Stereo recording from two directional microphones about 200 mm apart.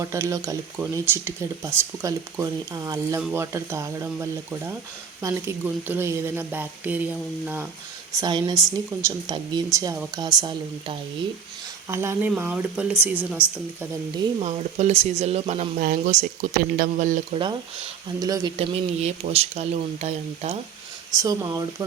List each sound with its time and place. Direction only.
0.0 s speech: 15° right (ahead or behind)
8.1 s speech: 20° right (ahead or behind)
14.2 s speech: 30° right (ahead or behind)
18.2 s speech: 20° right (ahead or behind)
18.5 s speech: 30° right (ahead or behind)
21.2 s speech: 15° right (ahead or behind)